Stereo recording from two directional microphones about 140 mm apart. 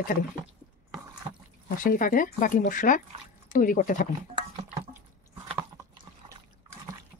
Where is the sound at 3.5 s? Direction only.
80° left.